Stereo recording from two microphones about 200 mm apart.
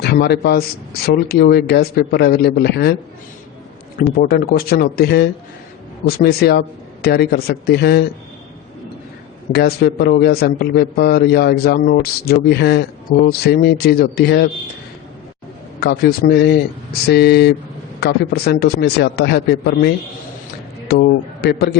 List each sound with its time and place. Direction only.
0.0 s a man's voice: 55° left (ahead or behind)
3.9 s a man's voice: 50° left (ahead or behind)
9.5 s a man's voice: 55° left (ahead or behind)
15.8 s a man's voice: 50° left (ahead or behind)